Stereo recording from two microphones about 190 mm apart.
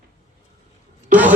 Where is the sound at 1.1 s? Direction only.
10° right (ahead or behind).